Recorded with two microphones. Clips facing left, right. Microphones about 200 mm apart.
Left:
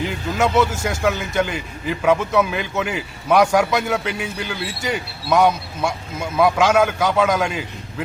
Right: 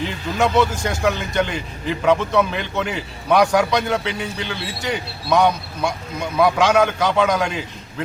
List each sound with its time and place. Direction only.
0.0 s speech: 5° left (ahead or behind)